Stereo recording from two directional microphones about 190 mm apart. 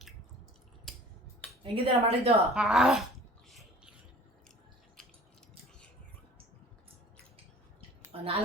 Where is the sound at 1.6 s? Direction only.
30° right (ahead or behind).